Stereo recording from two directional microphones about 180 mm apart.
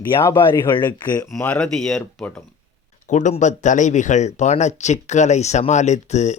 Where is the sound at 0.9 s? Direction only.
25° left (ahead or behind).